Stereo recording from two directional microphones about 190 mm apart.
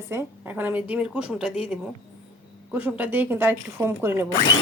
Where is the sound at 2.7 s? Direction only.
10° right (ahead or behind).